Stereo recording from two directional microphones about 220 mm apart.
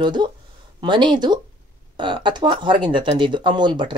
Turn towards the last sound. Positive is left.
turn(degrees=-20)  # may be behind; listen again after turning